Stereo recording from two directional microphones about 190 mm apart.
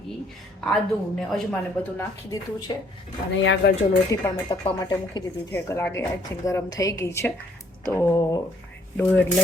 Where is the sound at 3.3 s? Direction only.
75° left (ahead or behind).